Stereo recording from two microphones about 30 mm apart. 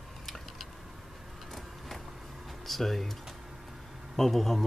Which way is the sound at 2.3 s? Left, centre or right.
Centre.